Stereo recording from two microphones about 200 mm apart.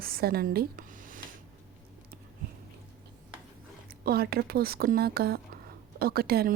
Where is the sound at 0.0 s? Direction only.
50° right (ahead or behind).